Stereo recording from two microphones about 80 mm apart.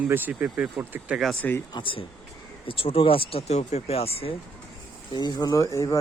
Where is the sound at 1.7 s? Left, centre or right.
Left.